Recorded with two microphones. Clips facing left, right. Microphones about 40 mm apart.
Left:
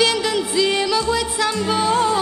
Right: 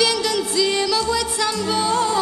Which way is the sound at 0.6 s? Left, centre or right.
Centre.